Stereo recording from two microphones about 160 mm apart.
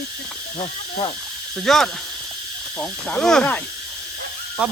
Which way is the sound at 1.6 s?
5° left (ahead or behind).